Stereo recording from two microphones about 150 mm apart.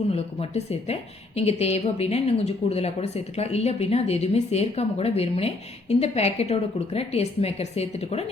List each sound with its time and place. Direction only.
0.1 s speech: 45° left (ahead or behind)